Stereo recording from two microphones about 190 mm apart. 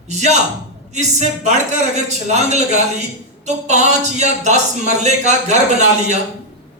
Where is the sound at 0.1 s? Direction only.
35° right (ahead or behind).